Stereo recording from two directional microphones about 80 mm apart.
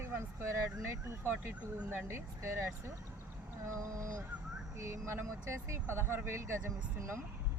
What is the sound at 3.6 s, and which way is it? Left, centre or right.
Speech, right.